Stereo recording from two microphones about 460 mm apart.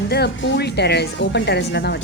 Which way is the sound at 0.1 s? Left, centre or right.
Left.